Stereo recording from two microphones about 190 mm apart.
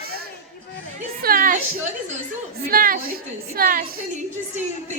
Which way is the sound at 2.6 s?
50° right (ahead or behind).